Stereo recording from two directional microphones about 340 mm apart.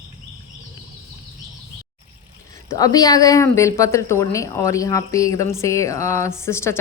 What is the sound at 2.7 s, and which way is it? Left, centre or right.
Speech, centre.